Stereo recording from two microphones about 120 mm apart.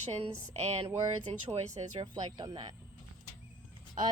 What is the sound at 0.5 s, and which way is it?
A woman's voice, 65° right (ahead or behind).